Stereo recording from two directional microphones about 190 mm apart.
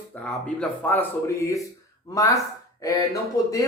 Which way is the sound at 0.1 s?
10° left (ahead or behind).